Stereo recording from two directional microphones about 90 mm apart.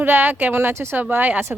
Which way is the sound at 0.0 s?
20° right (ahead or behind).